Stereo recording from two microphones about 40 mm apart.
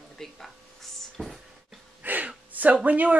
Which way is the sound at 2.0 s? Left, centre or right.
Right.